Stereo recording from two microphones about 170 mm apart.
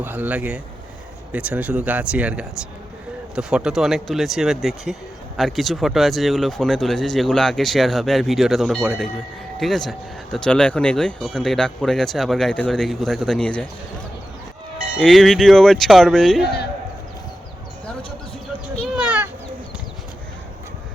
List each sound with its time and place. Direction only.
0.0 s speech: 10° right (ahead or behind); by 13.7 s 5° left (ahead or behind)
14.8 s speech: centre (ahead or behind)
16.4 s a man's voice: 70° left (ahead or behind)
18.8 s a sound: 5° right (ahead or behind)